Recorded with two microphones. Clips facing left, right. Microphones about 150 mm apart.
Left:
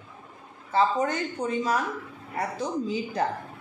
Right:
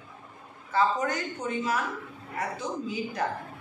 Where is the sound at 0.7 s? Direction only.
30° left (ahead or behind).